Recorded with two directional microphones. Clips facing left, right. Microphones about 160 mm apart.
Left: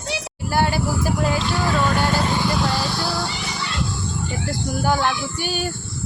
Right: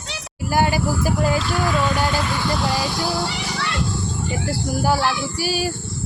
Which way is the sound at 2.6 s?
10° right (ahead or behind).